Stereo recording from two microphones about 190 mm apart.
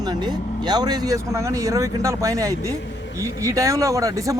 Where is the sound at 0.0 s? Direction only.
20° right (ahead or behind).